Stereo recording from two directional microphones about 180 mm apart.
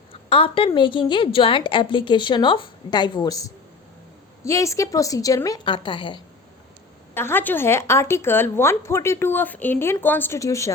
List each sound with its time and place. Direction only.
0.3 s a woman's voice: 30° left (ahead or behind)
7.1 s speech: 10° left (ahead or behind)